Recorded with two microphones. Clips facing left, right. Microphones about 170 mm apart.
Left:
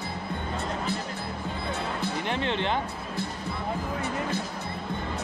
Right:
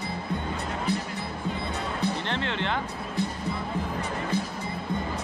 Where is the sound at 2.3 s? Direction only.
15° left (ahead or behind).